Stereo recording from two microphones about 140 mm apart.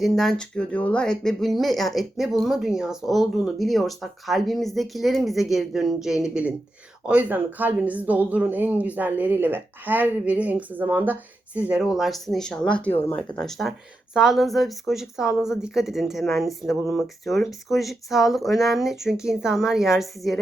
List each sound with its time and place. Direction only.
0.0 s speech: centre (ahead or behind)
13.4 s speech: centre (ahead or behind)